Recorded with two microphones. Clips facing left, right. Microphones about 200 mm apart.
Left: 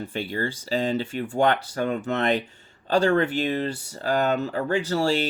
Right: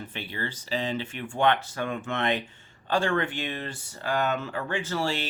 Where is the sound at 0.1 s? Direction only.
45° left (ahead or behind).